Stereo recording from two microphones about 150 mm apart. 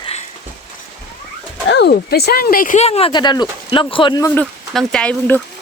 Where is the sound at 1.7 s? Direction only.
90° left; by 2.8 s 70° left (ahead or behind).